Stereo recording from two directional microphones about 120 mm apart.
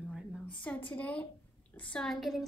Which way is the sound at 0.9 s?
10° left (ahead or behind).